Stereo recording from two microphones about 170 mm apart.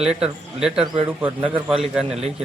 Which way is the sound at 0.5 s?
5° right (ahead or behind).